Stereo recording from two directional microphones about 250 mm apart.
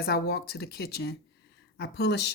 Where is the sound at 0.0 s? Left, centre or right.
Left.